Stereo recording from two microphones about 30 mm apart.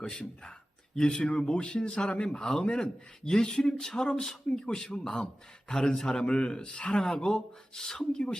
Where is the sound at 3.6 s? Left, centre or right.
Centre.